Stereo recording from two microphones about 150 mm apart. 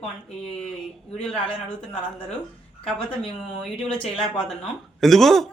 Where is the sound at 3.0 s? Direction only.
35° left (ahead or behind).